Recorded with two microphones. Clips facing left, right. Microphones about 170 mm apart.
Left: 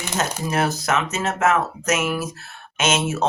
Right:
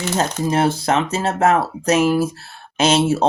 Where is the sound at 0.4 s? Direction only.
30° right (ahead or behind).